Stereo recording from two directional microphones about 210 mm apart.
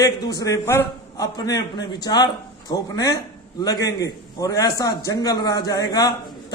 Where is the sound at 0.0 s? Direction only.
20° left (ahead or behind).